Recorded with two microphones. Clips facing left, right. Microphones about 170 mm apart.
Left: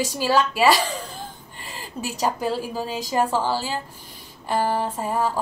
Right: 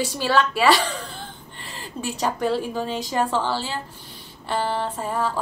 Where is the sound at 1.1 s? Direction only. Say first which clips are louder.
Left 1 dB; 40° left (ahead or behind).